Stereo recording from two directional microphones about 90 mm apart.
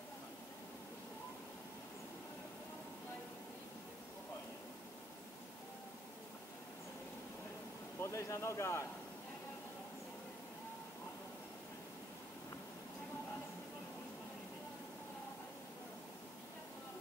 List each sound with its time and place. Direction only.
8.0 s speech: 35° left (ahead or behind)